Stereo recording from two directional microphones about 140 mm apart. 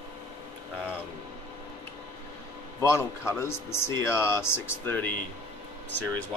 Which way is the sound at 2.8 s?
20° left (ahead or behind).